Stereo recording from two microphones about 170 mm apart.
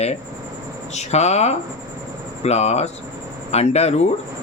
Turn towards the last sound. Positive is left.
turn(degrees=40)  # may be behind; listen again after turning